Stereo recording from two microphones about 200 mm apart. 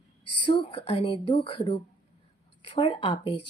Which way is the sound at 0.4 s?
25° left (ahead or behind).